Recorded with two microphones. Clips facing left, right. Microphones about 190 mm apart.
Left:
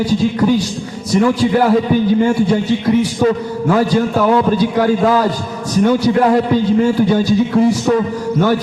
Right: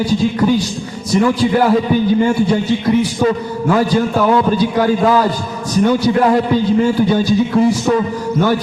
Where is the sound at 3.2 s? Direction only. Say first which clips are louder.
Left 1 dB; 40° left (ahead or behind).